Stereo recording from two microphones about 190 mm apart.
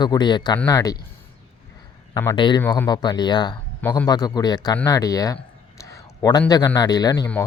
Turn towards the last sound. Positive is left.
turn(degrees=20)  # may be behind; listen again after turning